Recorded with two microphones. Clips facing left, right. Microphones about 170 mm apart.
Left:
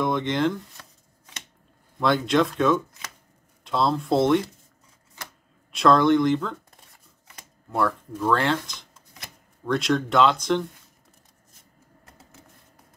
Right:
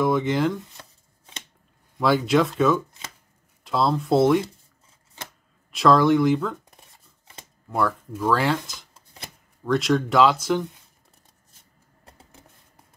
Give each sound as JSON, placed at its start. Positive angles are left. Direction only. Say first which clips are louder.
{"t": 0.0, "sound": "speech", "louder": "right 2 dB", "side_deg": -5}
{"t": 0.7, "sound": "chopping", "louder": "right 2 dB", "side_deg": -30}
{"t": 2.0, "sound": "speech", "louder": "right 1 dB", "side_deg": -5}
{"t": 5.7, "sound": "speech", "louder": "right 1 dB", "side_deg": 0}
{"t": 7.7, "sound": "speech", "louder": "even", "side_deg": 0}